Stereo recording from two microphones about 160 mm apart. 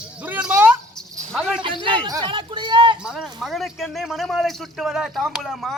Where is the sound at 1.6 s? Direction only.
30° right (ahead or behind).